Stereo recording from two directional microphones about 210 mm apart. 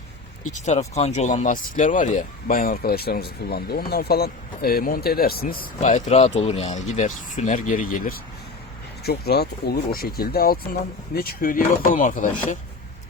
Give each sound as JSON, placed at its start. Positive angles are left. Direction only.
{"t": 0.5, "sound": "speech", "side_deg": 35}